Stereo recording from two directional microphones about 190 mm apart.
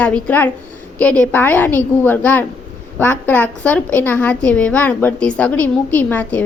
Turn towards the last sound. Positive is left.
turn(degrees=10)  # may be behind; listen again after turning